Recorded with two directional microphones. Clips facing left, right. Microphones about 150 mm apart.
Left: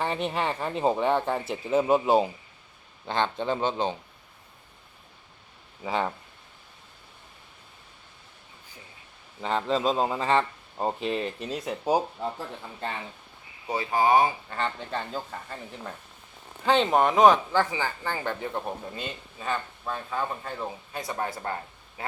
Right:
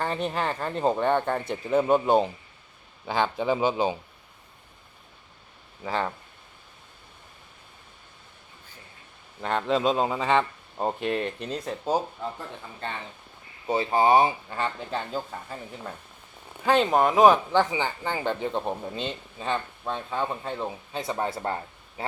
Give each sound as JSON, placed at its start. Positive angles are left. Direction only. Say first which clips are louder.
{"t": 0.0, "sound": "speech", "louder": "even", "side_deg": 0}
{"t": 1.4, "sound": "speech", "louder": "right 1 dB", "side_deg": 15}
{"t": 5.8, "sound": "speech", "louder": "even", "side_deg": 5}
{"t": 9.4, "sound": "speech", "louder": "right 1 dB", "side_deg": 0}
{"t": 13.7, "sound": "speech", "louder": "right 2 dB", "side_deg": -25}
{"t": 14.5, "sound": "speech", "louder": "right 1 dB", "side_deg": -10}
{"t": 17.5, "sound": "speech", "louder": "right 2 dB", "side_deg": -20}